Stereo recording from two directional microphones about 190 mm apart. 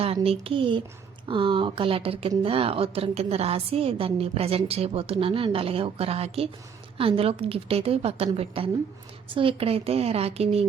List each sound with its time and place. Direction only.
0.0 s a woman's voice: 30° right (ahead or behind)